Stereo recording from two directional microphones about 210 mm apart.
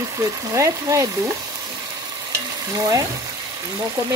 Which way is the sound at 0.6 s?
15° right (ahead or behind).